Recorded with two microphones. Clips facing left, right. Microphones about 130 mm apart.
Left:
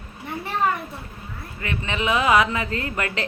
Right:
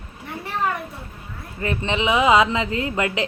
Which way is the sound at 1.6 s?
25° right (ahead or behind).